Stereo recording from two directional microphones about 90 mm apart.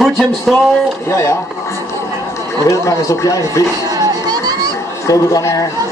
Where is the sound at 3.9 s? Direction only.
45° right (ahead or behind).